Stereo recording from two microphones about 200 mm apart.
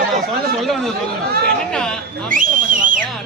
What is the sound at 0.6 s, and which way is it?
A man's voice, centre (ahead or behind).